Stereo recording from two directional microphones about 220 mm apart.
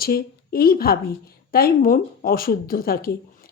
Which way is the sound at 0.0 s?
45° left (ahead or behind).